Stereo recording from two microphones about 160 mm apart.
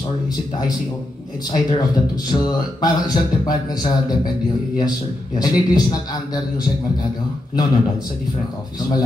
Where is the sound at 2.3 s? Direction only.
25° left (ahead or behind).